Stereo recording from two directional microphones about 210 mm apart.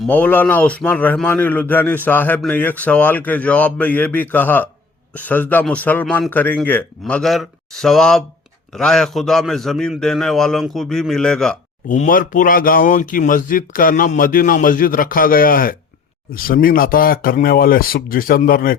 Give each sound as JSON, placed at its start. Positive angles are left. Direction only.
{"t": 0.0, "sound": "a man's voice", "side_deg": 10}
{"t": 11.9, "sound": "speech", "side_deg": 40}